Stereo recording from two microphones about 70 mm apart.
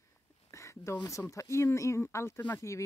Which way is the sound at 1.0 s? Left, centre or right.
Left.